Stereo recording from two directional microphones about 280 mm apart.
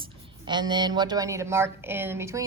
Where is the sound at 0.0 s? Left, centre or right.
Centre.